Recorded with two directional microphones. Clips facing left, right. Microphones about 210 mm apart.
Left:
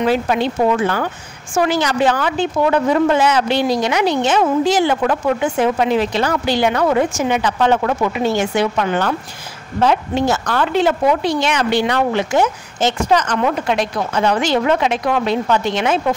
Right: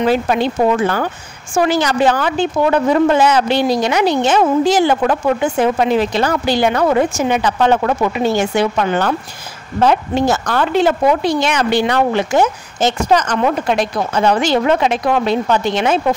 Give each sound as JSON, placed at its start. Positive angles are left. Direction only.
{"t": 0.0, "sound": "speech", "side_deg": -40}